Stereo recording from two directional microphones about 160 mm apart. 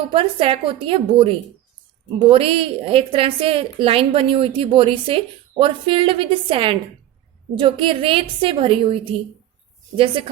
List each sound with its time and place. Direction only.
0.1 s a woman's voice: 35° right (ahead or behind)